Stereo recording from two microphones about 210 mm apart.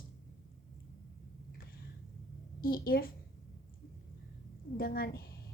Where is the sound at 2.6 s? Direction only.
45° left (ahead or behind).